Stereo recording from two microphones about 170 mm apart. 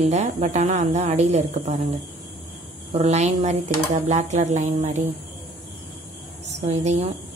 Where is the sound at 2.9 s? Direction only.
40° right (ahead or behind).